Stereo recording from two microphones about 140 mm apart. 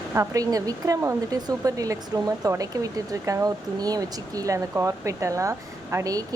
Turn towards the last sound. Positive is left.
turn(degrees=-25)  # may be behind; listen again after turning